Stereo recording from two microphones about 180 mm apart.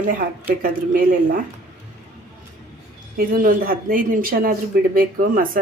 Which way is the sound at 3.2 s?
55° right (ahead or behind).